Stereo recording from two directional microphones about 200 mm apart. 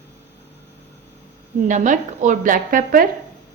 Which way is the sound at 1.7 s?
40° right (ahead or behind).